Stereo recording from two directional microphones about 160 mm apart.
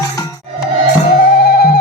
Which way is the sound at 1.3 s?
70° left (ahead or behind).